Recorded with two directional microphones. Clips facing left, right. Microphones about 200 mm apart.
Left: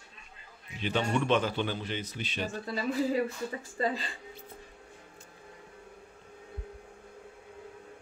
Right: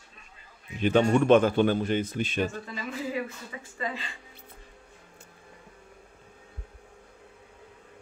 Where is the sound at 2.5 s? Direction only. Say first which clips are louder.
Left 5 dB; 35° left (ahead or behind).